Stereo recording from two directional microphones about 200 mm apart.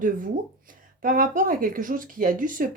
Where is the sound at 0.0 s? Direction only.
45° right (ahead or behind).